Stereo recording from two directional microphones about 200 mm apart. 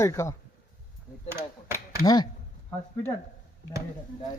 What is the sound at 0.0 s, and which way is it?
Speech, 15° left (ahead or behind).